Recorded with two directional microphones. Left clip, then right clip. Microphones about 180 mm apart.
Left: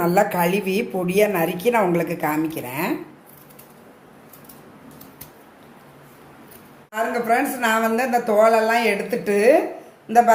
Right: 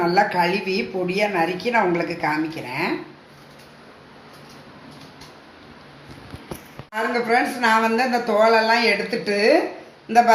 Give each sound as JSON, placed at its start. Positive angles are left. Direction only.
{"t": 0.0, "sound": "a woman's voice", "side_deg": 70}
{"t": 6.9, "sound": "speech", "side_deg": 40}